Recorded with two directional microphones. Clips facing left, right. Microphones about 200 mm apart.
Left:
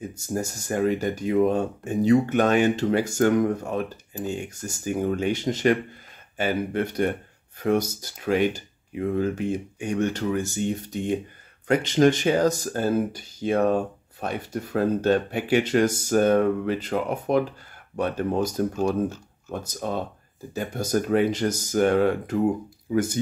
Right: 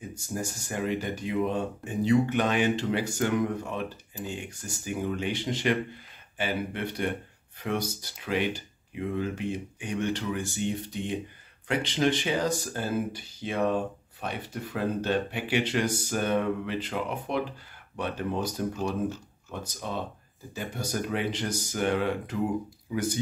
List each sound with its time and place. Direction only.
0.3 s speech: 45° left (ahead or behind)